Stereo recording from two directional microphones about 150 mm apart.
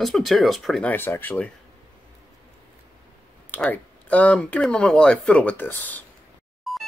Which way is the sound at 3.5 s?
10° left (ahead or behind).